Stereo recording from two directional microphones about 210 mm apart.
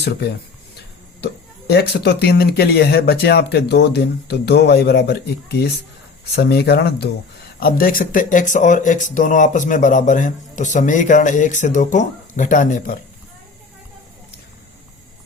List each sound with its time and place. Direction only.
0.0 s speech: 50° left (ahead or behind)